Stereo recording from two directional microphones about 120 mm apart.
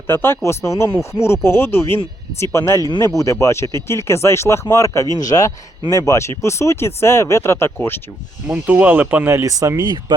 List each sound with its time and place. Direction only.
0.1 s speech: 20° left (ahead or behind)
8.4 s speech: 15° right (ahead or behind); by 10.2 s 35° right (ahead or behind)